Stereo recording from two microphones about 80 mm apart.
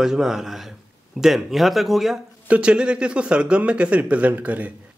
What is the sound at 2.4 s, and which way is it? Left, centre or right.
Speech, centre.